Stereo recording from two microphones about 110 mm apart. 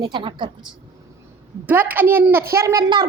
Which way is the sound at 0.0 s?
45° right (ahead or behind).